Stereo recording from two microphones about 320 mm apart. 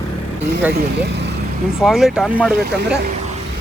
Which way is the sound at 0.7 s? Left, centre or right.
Right.